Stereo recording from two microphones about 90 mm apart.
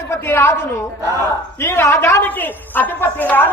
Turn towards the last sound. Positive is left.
turn(degrees=20)  # may be behind; listen again after turning